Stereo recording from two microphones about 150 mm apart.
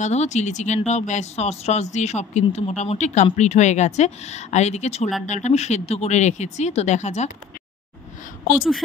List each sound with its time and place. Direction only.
0.0 s speech: 50° left (ahead or behind)
8.5 s speech: centre (ahead or behind)